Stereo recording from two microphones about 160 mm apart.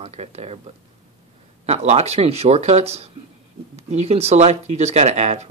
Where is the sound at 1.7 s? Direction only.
45° right (ahead or behind).